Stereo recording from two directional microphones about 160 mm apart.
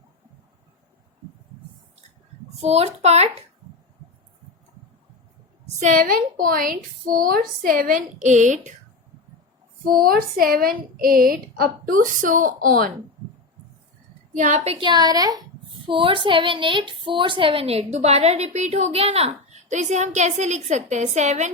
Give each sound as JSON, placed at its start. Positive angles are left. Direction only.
{"t": 2.6, "sound": "a woman's voice", "side_deg": -40}
{"t": 5.6, "sound": "a woman's voice", "side_deg": -55}
{"t": 9.8, "sound": "a woman's voice", "side_deg": -65}
{"t": 14.3, "sound": "a woman's voice", "side_deg": -45}